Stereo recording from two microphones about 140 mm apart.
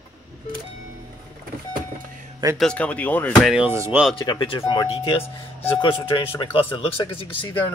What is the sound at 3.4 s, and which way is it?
Speech, 5° right (ahead or behind).